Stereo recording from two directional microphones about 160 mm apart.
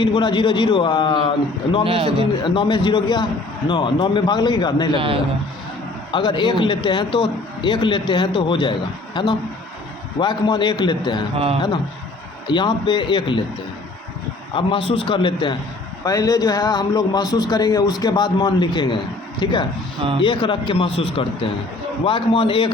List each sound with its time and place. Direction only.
0.0 s a man's voice: 30° left (ahead or behind)
1.9 s a man's voice: 35° right (ahead or behind)
2.4 s a man's voice: 30° left (ahead or behind)
4.9 s a man's voice: 35° right (ahead or behind)
6.1 s a man's voice: 30° left (ahead or behind)
12.5 s a man's voice: 30° left (ahead or behind)
14.5 s a man's voice: 35° left (ahead or behind)